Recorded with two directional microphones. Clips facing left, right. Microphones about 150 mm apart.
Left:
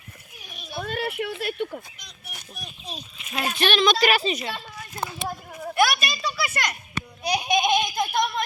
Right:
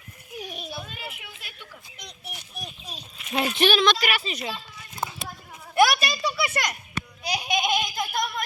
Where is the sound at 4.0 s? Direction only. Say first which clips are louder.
Left 7 dB; 35° left (ahead or behind).